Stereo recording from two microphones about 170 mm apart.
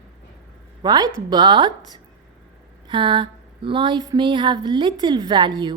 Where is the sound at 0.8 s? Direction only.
25° right (ahead or behind).